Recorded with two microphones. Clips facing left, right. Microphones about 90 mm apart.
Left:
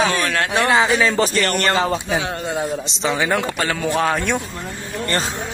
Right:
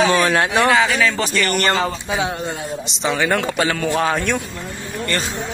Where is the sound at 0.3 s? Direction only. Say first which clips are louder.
Right 3 dB; 15° right (ahead or behind).